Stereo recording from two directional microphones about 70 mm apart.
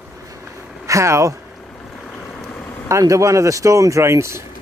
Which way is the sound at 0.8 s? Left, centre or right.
Right.